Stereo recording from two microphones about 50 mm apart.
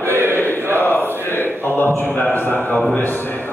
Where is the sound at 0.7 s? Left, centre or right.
Left.